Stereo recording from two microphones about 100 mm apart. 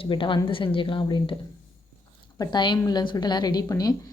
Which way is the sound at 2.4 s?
50° left (ahead or behind).